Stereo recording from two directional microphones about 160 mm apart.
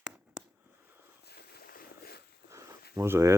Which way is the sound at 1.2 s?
80° left.